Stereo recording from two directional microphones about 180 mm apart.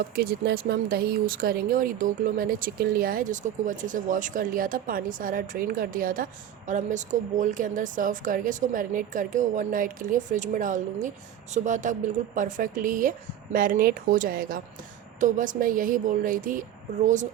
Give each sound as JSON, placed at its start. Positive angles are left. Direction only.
{"t": 0.0, "sound": "speech", "side_deg": -60}